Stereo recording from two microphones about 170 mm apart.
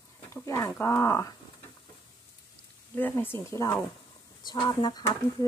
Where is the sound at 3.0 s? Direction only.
10° left (ahead or behind).